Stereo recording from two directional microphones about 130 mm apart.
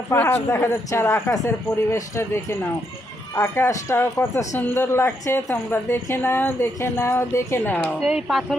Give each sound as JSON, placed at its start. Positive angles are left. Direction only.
{"t": 0.1, "sound": "speech", "side_deg": 20}
{"t": 3.3, "sound": "a woman's voice", "side_deg": 20}
{"t": 8.0, "sound": "speech", "side_deg": -5}